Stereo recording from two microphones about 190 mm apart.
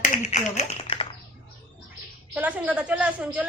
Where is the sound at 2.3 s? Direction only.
10° right (ahead or behind).